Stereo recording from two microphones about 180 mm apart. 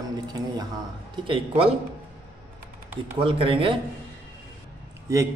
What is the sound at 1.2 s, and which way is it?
Speech, 30° right (ahead or behind).